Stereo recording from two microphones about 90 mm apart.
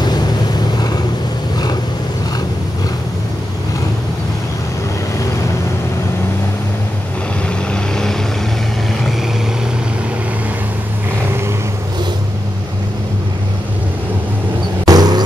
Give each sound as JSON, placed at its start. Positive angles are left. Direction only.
{"t": 7.4, "sound": "vehicle", "side_deg": 10}
{"t": 14.9, "sound": "vehicle", "side_deg": -50}